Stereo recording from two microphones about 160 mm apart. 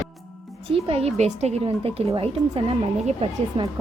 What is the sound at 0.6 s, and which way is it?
A woman's voice, 40° right (ahead or behind).